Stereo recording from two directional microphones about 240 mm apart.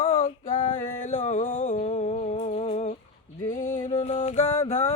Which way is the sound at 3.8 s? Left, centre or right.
Left.